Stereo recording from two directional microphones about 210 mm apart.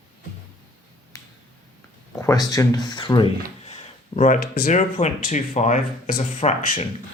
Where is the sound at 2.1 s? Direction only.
15° left (ahead or behind).